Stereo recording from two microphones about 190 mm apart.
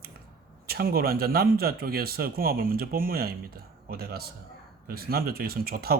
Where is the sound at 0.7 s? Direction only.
55° right (ahead or behind).